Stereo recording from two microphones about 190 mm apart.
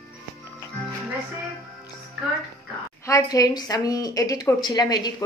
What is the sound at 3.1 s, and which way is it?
A woman's voice, 20° left (ahead or behind).